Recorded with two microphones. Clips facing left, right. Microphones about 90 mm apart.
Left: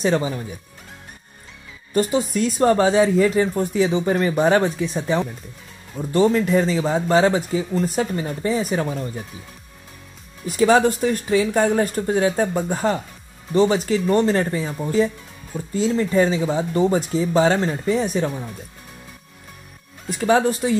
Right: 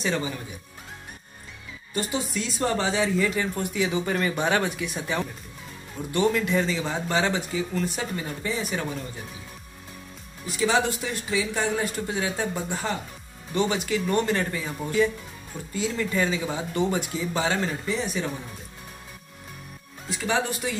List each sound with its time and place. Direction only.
0.0 s speech: 40° left (ahead or behind)
2.0 s speech: 45° left (ahead or behind)
10.4 s speech: 45° left (ahead or behind); by 15.0 s 25° left (ahead or behind)
15.7 s speech: 35° left (ahead or behind)
20.1 s speech: 45° left (ahead or behind)